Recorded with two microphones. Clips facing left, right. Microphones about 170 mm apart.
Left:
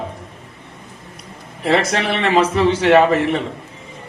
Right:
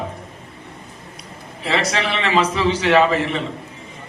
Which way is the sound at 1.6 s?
50° left (ahead or behind).